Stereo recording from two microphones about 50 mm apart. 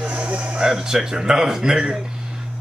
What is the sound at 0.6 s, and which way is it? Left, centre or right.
Speech, centre.